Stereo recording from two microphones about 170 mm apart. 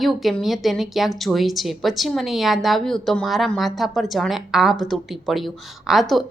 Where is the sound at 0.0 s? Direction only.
Centre (ahead or behind).